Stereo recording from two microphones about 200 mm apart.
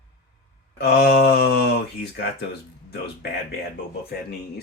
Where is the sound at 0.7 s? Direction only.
55° left (ahead or behind).